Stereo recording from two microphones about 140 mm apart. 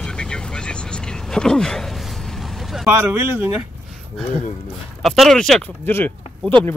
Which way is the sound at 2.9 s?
15° right (ahead or behind).